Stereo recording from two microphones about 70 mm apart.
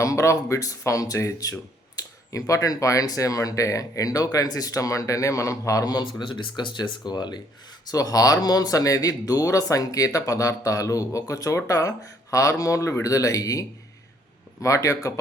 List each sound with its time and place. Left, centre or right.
0.0 s speech: left
7.9 s speech: left